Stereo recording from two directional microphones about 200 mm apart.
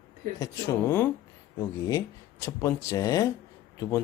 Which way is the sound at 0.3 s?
15° left (ahead or behind).